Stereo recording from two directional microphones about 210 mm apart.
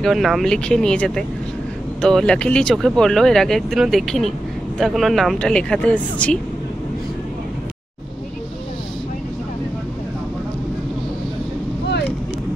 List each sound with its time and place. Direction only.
0.0 s speech: centre (ahead or behind)